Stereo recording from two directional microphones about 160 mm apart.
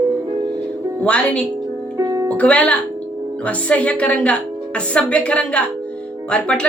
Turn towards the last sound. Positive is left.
turn(degrees=5)  # may be behind; listen again after turning